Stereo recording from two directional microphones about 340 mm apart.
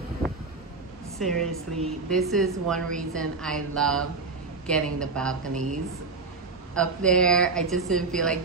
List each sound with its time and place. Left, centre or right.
1.2 s speech: centre
5.5 s speech: right
6.7 s speech: centre